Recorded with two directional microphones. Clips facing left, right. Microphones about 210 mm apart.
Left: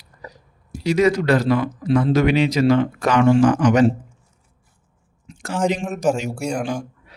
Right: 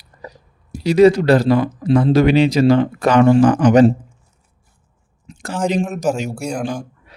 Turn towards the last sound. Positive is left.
turn(degrees=-5)  # may be behind; listen again after turning